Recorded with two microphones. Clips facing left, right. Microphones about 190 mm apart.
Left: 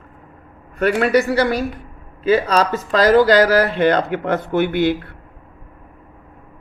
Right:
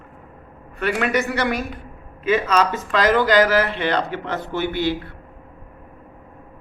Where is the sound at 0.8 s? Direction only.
40° left (ahead or behind); by 4.9 s 55° left (ahead or behind).